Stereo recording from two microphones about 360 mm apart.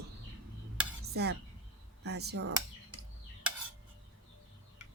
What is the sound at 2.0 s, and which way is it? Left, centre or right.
Speech, right.